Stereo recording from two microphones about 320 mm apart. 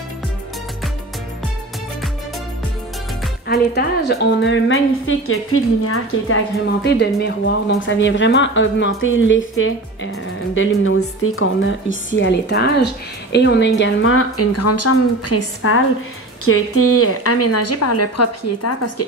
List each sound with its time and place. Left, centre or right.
3.4 s a woman's voice: left